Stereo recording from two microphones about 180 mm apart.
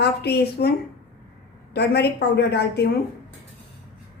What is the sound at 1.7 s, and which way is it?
A woman's voice, 65° left (ahead or behind).